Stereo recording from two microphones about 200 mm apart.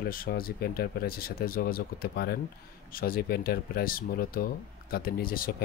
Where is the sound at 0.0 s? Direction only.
50° left (ahead or behind).